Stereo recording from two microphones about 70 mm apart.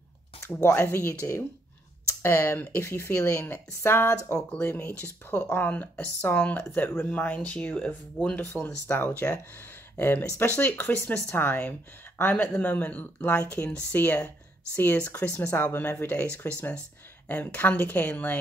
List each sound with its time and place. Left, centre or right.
0.6 s speech: left
3.2 s speech: left
3.8 s speech: left